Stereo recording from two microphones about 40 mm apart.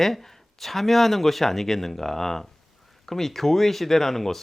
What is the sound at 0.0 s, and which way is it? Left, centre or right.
Speech, centre.